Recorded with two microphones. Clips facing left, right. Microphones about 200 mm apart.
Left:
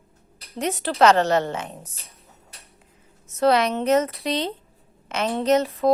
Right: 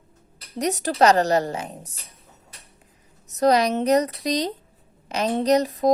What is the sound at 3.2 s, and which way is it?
A woman's voice, 40° right (ahead or behind).